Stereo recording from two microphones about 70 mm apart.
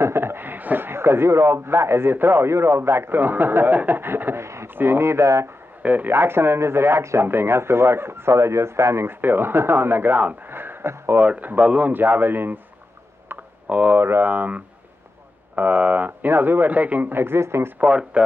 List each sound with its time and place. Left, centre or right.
0.0 s speech: right
5.8 s speech: right
11.1 s speech: right
13.7 s speech: right
17.7 s speech: centre